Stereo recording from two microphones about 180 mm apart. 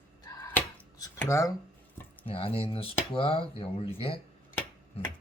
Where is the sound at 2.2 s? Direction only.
30° left (ahead or behind).